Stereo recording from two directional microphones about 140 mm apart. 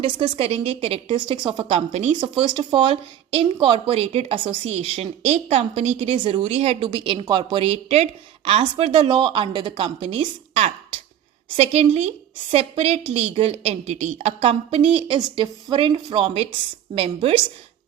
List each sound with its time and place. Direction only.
0.0 s a woman's voice: 40° right (ahead or behind)